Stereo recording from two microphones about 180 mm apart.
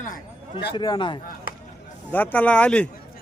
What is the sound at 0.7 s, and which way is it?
Speech, 25° left (ahead or behind).